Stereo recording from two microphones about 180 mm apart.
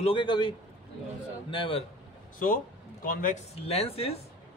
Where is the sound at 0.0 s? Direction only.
30° left (ahead or behind).